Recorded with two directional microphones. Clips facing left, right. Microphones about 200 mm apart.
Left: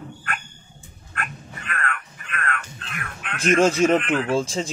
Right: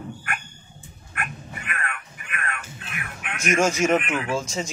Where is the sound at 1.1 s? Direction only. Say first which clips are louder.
Even; 15° right (ahead or behind).